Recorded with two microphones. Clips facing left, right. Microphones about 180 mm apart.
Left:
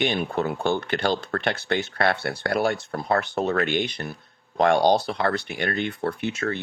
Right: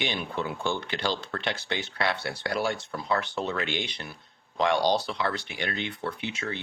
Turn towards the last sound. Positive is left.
turn(degrees=45)  # may be behind; listen again after turning